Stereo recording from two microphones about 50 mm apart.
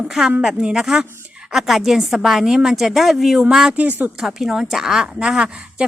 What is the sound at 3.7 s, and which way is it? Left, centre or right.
Speech, right.